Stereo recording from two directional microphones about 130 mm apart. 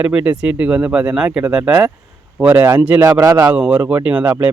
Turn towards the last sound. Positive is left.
turn(degrees=-15)  # may be behind; listen again after turning